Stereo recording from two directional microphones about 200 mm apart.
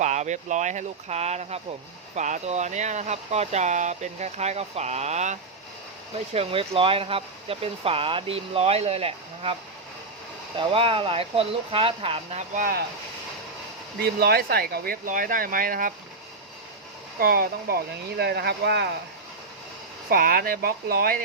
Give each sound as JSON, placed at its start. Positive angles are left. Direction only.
{"t": 0.0, "sound": "speech", "side_deg": -35}
{"t": 10.6, "sound": "speech", "side_deg": -25}
{"t": 14.0, "sound": "speech", "side_deg": -50}
{"t": 17.2, "sound": "speech", "side_deg": -45}
{"t": 20.1, "sound": "speech", "side_deg": -45}